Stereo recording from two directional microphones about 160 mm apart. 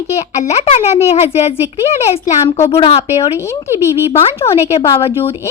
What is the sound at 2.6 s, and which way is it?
Speech, 35° left (ahead or behind).